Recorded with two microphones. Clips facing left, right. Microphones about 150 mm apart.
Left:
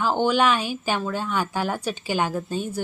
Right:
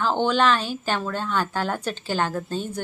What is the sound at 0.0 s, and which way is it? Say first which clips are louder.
A woman's voice: even; 10° left (ahead or behind).